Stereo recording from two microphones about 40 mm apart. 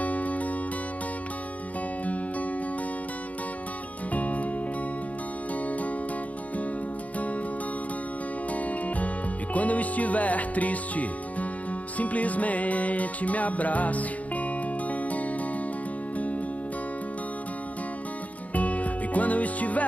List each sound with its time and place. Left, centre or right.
0.0 s music: left
4.1 s music: left
8.5 s music: left
18.5 s music: left